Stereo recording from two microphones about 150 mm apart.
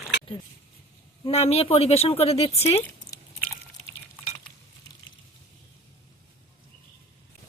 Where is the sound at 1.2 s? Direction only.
40° left (ahead or behind).